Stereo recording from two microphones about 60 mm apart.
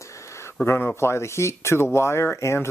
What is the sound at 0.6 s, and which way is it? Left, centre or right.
Speech, left.